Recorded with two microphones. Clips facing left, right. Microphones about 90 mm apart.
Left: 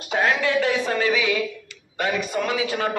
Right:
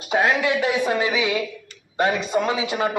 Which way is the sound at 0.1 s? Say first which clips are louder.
Right 1 dB; 15° right (ahead or behind).